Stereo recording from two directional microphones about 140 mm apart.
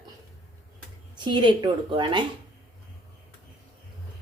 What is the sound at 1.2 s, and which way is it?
A woman's voice, 35° right (ahead or behind).